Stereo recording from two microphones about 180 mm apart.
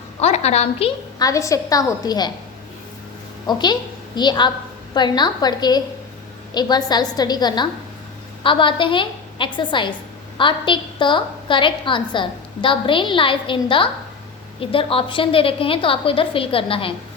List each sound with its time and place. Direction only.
0.2 s a woman's voice: 35° left (ahead or behind)
1.2 s a woman's voice: 20° left (ahead or behind)
3.4 s a woman's voice: 25° left (ahead or behind)